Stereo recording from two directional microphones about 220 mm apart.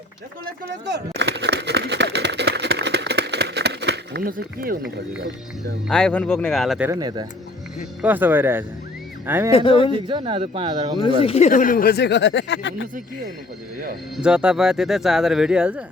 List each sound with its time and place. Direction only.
1.2 s a sound: 50° right (ahead or behind)
4.9 s speech: 50° right (ahead or behind)
5.9 s speech: 5° left (ahead or behind)
9.5 s speech: 25° left (ahead or behind)
10.1 s speech: 20° right (ahead or behind)
11.0 s speech: 25° left (ahead or behind); by 12.9 s 55° left (ahead or behind)
14.2 s speech: 5° right (ahead or behind)